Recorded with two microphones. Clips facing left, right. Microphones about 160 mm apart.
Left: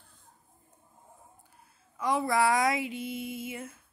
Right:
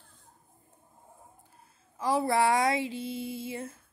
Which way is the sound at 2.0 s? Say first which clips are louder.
Right 1 dB; 30° right (ahead or behind).